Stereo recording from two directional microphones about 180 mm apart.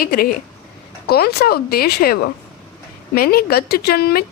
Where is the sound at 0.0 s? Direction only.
55° left (ahead or behind).